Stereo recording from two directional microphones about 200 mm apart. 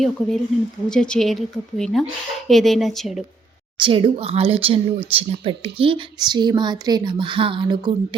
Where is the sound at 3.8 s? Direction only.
25° right (ahead or behind).